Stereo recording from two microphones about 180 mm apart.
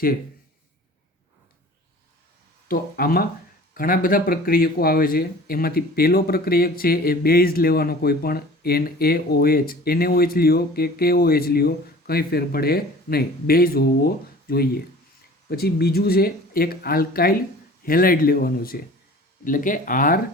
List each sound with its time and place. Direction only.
2.6 s speech: 55° left (ahead or behind)